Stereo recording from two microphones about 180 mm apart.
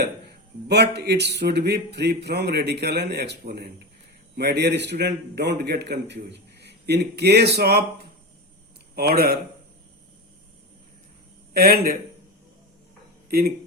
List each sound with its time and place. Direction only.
0.7 s a man's voice: 70° right (ahead or behind)
9.0 s a man's voice: 60° right (ahead or behind)
11.5 s a man's voice: 60° right (ahead or behind)